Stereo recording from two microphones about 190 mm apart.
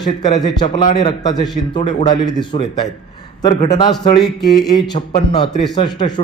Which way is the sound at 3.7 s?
20° left (ahead or behind).